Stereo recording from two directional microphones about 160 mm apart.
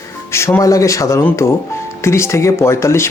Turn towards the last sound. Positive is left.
turn(degrees=15)  # may be behind; listen again after turning